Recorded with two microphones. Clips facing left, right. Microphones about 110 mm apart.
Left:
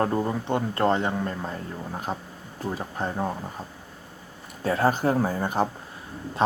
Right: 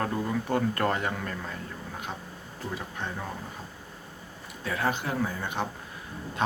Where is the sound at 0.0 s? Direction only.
30° left (ahead or behind).